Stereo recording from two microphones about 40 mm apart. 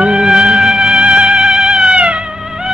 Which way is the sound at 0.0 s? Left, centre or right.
Centre.